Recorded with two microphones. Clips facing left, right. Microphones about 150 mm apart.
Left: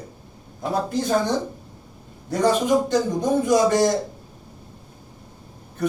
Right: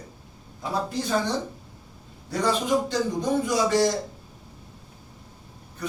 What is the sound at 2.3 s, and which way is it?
A man's voice, 45° left (ahead or behind).